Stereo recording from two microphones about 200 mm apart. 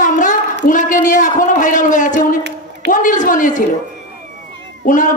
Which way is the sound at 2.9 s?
40° left (ahead or behind).